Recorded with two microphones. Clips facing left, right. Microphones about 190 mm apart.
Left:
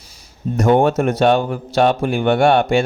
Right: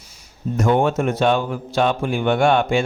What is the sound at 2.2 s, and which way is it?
Speech, 65° left (ahead or behind).